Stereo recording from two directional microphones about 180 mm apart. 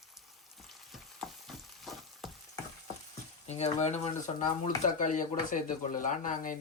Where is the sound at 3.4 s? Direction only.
40° left (ahead or behind).